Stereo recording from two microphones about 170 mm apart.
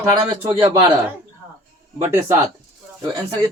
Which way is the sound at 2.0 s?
15° right (ahead or behind).